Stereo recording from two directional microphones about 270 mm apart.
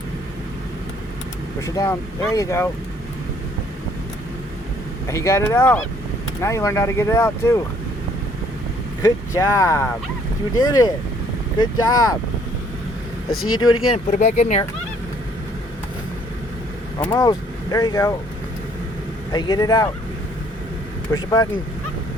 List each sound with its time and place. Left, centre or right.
1.6 s speech: centre
5.0 s speech: centre
9.0 s speech: centre
13.9 s speech: left
17.0 s speech: centre
19.3 s speech: centre
21.1 s speech: centre